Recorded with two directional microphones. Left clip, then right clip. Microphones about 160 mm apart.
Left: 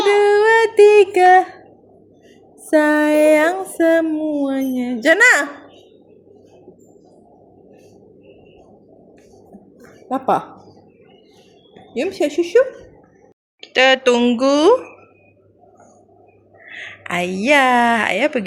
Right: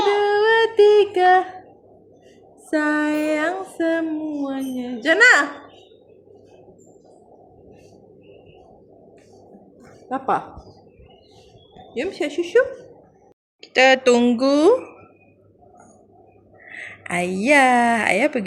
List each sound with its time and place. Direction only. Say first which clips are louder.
0.2 s music: left 4 dB; 55° left (ahead or behind)
2.6 s a sound: left 6 dB; 50° left (ahead or behind)
4.4 s a woman's voice: left 6 dB; 55° left (ahead or behind)
10.1 s a woman's voice: left 4 dB; 55° left (ahead or behind)
11.9 s speech: left 5 dB; 50° left (ahead or behind)
13.6 s speech: left 1 dB; centre (ahead or behind)
16.6 s a woman's voice: left 3 dB; 5° right (ahead or behind)